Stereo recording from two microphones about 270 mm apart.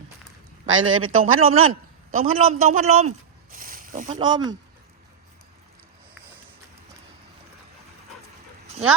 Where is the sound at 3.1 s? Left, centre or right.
Right.